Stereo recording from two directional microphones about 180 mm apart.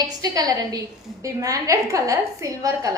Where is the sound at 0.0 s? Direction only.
20° right (ahead or behind).